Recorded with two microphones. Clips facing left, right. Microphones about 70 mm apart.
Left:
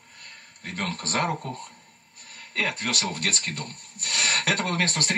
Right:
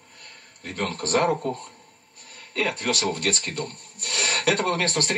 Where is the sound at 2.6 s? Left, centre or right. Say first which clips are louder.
Right 3 dB; right.